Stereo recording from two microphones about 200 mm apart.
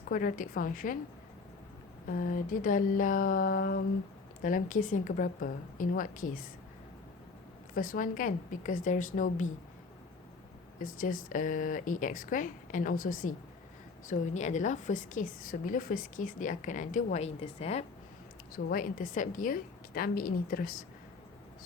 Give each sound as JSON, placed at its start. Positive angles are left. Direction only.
{"t": 0.1, "sound": "a woman's voice", "side_deg": 45}
{"t": 2.0, "sound": "a woman's voice", "side_deg": 45}
{"t": 7.8, "sound": "a woman's voice", "side_deg": 45}
{"t": 10.8, "sound": "a woman's voice", "side_deg": 40}
{"t": 18.5, "sound": "a woman's voice", "side_deg": 45}